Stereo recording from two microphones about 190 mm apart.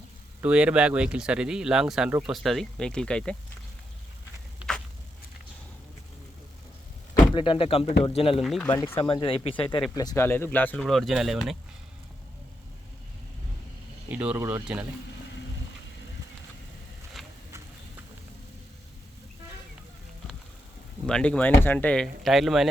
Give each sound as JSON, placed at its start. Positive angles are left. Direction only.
{"t": 0.4, "sound": "speech", "side_deg": -5}
{"t": 7.3, "sound": "speech", "side_deg": 25}
{"t": 8.4, "sound": "speech", "side_deg": 0}
{"t": 8.6, "sound": "speech", "side_deg": 20}
{"t": 14.1, "sound": "speech", "side_deg": -5}
{"t": 21.1, "sound": "speech", "side_deg": 5}